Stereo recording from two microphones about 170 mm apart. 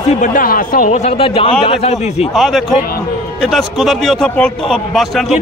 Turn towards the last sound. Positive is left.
turn(degrees=0)  # may be behind; listen again after turning